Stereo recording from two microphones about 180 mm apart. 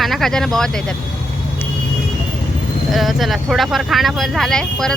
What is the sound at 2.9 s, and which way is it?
Speech, centre (ahead or behind).